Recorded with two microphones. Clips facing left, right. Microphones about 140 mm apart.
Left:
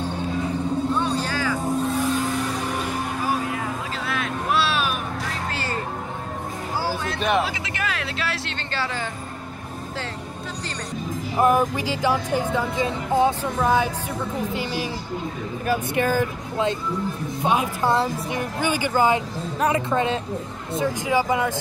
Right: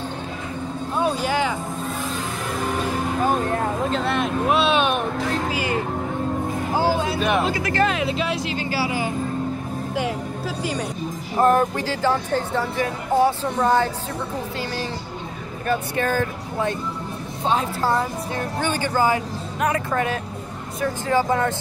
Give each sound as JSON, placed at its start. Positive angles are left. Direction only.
{"t": 0.9, "sound": "vehicle", "side_deg": -10}
{"t": 3.3, "sound": "vehicle", "side_deg": 5}
{"t": 5.5, "sound": "music", "side_deg": -10}
{"t": 7.2, "sound": "speech", "side_deg": 0}
{"t": 11.3, "sound": "speech", "side_deg": 10}
{"t": 13.6, "sound": "speech", "side_deg": 5}
{"t": 15.6, "sound": "speech", "side_deg": 10}